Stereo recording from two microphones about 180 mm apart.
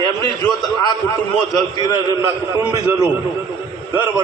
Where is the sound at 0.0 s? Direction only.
25° right (ahead or behind).